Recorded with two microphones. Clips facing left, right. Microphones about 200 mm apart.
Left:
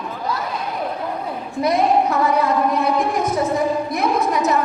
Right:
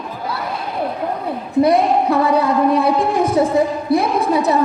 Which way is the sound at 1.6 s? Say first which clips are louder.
Right 3 dB; 30° right (ahead or behind).